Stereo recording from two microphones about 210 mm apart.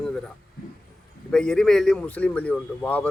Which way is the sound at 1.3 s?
5° left (ahead or behind).